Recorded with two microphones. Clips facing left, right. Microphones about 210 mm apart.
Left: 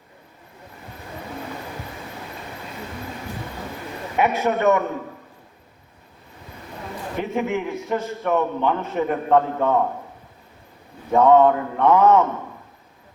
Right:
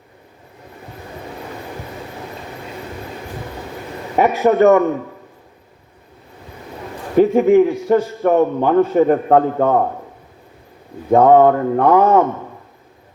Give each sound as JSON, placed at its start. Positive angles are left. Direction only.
{"t": 4.2, "sound": "a man's voice", "side_deg": -40}
{"t": 7.2, "sound": "a man's voice", "side_deg": -35}
{"t": 9.0, "sound": "a man's voice", "side_deg": -50}
{"t": 11.1, "sound": "a man's voice", "side_deg": -50}
{"t": 11.9, "sound": "a man's voice", "side_deg": -35}